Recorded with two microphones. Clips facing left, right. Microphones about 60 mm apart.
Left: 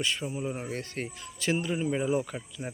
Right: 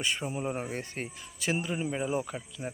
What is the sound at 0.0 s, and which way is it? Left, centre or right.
Speech, centre.